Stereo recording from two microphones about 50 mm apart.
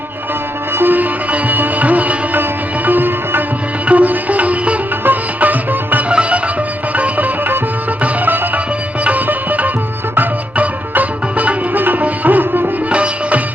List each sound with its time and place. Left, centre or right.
0.8 s music: right
1.3 s sitar: right
2.4 s music: right
3.8 s sitar: right
5.0 s music: right
6.1 s music: right
6.9 s music: right
12.9 s music: right